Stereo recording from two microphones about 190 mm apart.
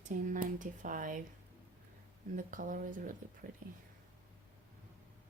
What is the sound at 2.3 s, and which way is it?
Speech, 45° right (ahead or behind).